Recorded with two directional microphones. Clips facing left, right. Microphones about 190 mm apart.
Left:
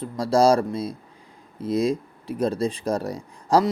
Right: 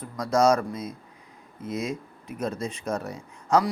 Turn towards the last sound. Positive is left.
turn(degrees=35)  # may be behind; listen again after turning